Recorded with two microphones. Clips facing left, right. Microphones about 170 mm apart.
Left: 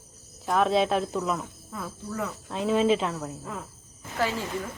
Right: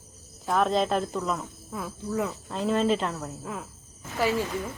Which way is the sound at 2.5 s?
Centre (ahead or behind).